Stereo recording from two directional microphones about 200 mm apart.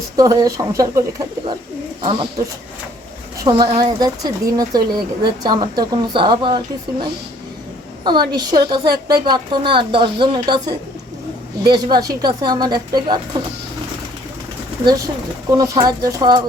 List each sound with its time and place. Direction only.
0.2 s a woman's voice: 15° right (ahead or behind)
3.4 s a woman's voice: 25° right (ahead or behind)
8.0 s a woman's voice: 20° right (ahead or behind)
14.8 s speech: 15° right (ahead or behind)